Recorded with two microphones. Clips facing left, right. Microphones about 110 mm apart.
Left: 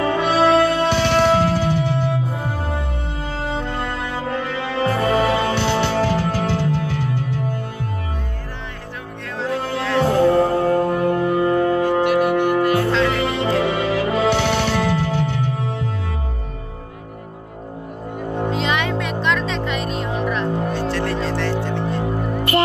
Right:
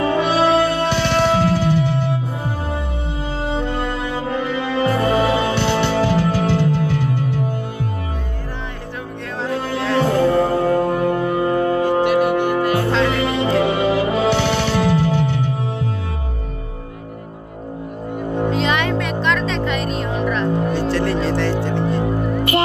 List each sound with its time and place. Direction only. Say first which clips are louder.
0.0 s music: even; 10° right (ahead or behind)
3.4 s music: right 3 dB; 15° right (ahead or behind)
9.9 s music: left 1 dB; 5° right (ahead or behind)
12.9 s music: right 1 dB; 25° right (ahead or behind)
13.2 s music: right 2 dB; 10° right (ahead or behind)
18.5 s music: right 2 dB; 15° left (ahead or behind)
20.4 s music: right 3 dB; centre (ahead or behind)
20.7 s music: right 3 dB; 20° right (ahead or behind)
22.0 s music: right 3 dB; centre (ahead or behind)